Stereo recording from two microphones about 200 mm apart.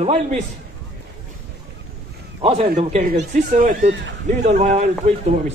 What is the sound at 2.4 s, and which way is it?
A man's voice, 30° right (ahead or behind).